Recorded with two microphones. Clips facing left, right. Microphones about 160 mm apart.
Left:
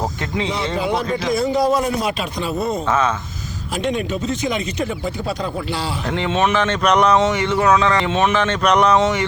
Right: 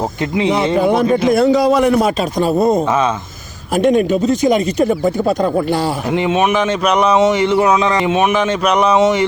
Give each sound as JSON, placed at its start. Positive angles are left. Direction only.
{"t": 0.4, "sound": "a man's voice", "side_deg": -55}
{"t": 2.0, "sound": "speech", "side_deg": -45}
{"t": 6.1, "sound": "speech", "side_deg": -10}